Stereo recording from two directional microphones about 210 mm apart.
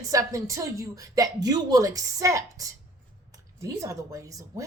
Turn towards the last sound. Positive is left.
turn(degrees=-15)  # may be behind; listen again after turning